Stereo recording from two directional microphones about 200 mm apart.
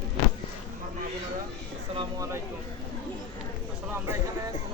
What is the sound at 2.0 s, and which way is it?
Speech, 15° right (ahead or behind).